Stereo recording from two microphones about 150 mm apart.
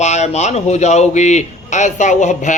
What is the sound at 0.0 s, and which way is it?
Speech, 50° left (ahead or behind).